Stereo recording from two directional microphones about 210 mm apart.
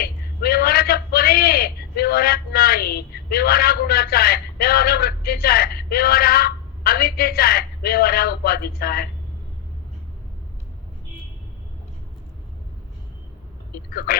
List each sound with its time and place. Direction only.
0.0 s a man's voice: 45° left (ahead or behind)
14.1 s speech: 45° left (ahead or behind)